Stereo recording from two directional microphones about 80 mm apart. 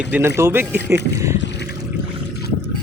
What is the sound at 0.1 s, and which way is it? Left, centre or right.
Speech, right.